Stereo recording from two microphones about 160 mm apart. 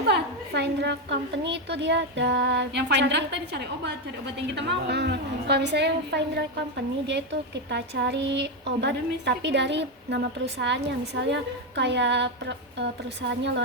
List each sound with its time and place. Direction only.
0.1 s a woman's voice: 90° right